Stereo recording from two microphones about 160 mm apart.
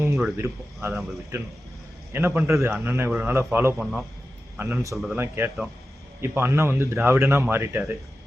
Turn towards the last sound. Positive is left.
turn(degrees=-15)  # may be behind; listen again after turning